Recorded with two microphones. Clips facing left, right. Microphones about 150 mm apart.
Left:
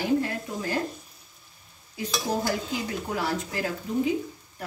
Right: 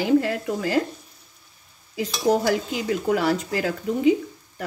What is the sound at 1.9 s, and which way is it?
Speech, 90° right.